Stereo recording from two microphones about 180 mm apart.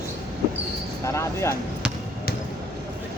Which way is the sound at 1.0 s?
15° left (ahead or behind).